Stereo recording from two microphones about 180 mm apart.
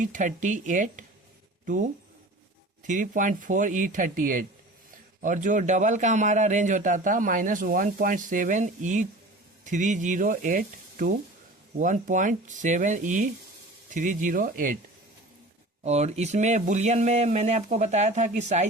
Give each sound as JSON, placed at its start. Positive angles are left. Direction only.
{"t": 0.0, "sound": "a man's voice", "side_deg": -45}
{"t": 15.8, "sound": "speech", "side_deg": -35}